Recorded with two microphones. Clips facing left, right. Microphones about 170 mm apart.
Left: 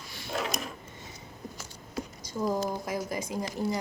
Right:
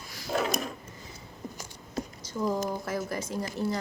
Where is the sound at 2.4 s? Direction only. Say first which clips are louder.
Even; 15° left (ahead or behind).